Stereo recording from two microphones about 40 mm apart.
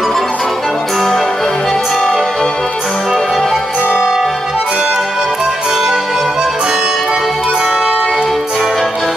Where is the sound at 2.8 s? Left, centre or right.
Centre.